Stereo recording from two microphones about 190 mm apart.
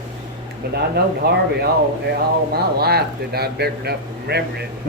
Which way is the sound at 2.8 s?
55° right (ahead or behind).